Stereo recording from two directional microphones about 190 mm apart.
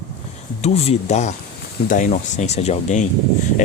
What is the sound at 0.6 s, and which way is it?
Speech, 30° left (ahead or behind).